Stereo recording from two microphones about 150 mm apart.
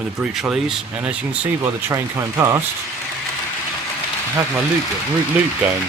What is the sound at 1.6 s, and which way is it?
Speech, 20° right (ahead or behind).